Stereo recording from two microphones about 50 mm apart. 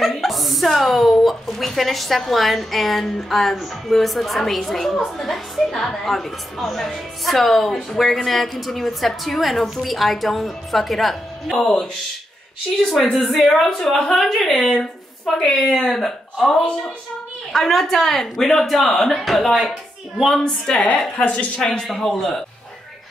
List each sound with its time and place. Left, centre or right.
0.0 s a woman's voice: centre
11.6 s speech: centre
12.9 s a woman's voice: centre
21.2 s a woman's voice: left
21.5 s speech: centre